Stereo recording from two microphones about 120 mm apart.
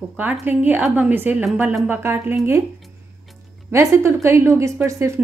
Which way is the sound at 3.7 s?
25° right (ahead or behind).